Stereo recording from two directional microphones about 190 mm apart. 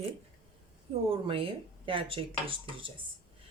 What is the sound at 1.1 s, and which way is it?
Speech, 30° right (ahead or behind).